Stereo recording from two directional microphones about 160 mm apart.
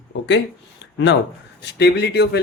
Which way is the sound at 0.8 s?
90° left.